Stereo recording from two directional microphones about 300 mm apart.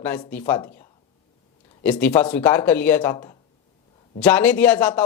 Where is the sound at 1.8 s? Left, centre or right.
Centre.